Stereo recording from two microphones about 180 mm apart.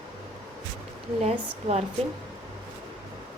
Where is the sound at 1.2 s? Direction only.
35° right (ahead or behind).